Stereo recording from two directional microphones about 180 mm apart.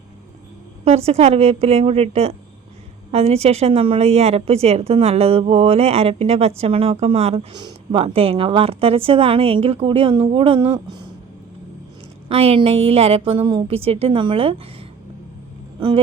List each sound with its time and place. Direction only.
0.9 s a woman's voice: 35° right (ahead or behind)
12.3 s a woman's voice: 30° right (ahead or behind)